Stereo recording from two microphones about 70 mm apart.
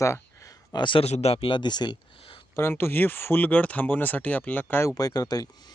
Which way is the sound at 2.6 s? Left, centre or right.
Left.